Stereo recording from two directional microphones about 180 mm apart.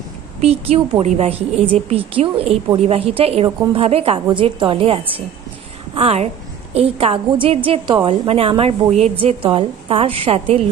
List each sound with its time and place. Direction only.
0.4 s a woman's voice: 35° right (ahead or behind)